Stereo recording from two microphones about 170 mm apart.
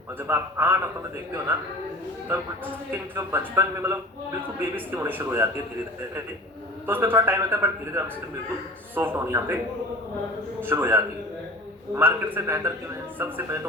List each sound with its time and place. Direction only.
0.2 s speech: 15° right (ahead or behind)
2.3 s speech: 15° right (ahead or behind)
6.8 s speech: 10° right (ahead or behind)
10.6 s speech: 10° right (ahead or behind)